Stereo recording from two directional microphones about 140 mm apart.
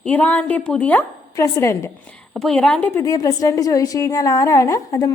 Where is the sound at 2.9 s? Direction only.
25° left (ahead or behind).